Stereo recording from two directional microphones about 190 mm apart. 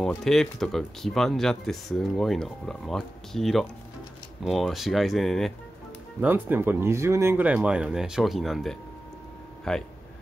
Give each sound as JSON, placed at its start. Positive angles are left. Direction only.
{"t": 0.0, "sound": "speech", "side_deg": 0}
{"t": 6.2, "sound": "speech", "side_deg": -10}